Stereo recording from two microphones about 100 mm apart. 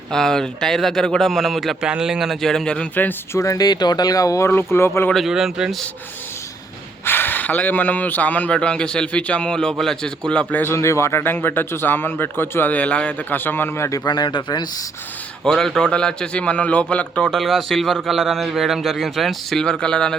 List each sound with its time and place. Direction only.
0.1 s a man's voice: 5° left (ahead or behind)
3.3 s speech: 35° left (ahead or behind)
5.1 s a man's voice: 5° right (ahead or behind)
7.0 s speech: 20° left (ahead or behind)
10.6 s speech: 25° left (ahead or behind)
14.0 s speech: 45° left (ahead or behind)
15.4 s speech: 5° left (ahead or behind)
17.3 s a man's voice: centre (ahead or behind)